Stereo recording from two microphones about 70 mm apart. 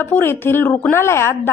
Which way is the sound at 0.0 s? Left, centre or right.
Left.